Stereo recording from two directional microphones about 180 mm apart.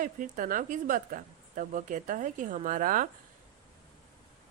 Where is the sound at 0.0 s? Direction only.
50° right (ahead or behind).